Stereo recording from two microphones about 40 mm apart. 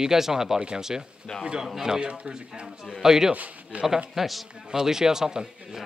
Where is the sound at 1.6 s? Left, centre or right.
Centre.